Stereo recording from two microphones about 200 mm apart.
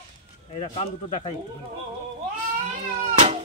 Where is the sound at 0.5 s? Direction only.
30° left (ahead or behind).